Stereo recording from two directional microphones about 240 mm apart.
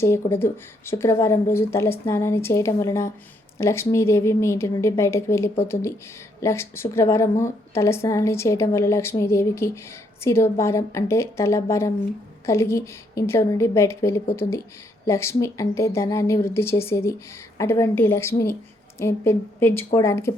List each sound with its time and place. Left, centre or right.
0.0 s a woman's voice: centre
14.4 s speech: left
15.0 s a woman's voice: centre